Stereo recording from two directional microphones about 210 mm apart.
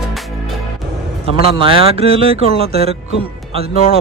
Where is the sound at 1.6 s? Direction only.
25° right (ahead or behind).